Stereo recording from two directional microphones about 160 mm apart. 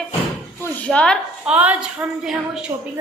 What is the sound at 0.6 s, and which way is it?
Speech, 10° left (ahead or behind).